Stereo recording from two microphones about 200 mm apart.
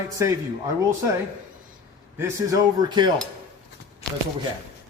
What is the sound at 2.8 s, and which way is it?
Speech, 20° right (ahead or behind).